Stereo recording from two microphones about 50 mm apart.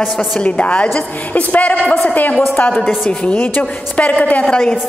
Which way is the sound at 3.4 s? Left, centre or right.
Left.